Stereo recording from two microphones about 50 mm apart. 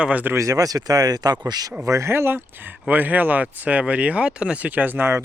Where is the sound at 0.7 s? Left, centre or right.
Right.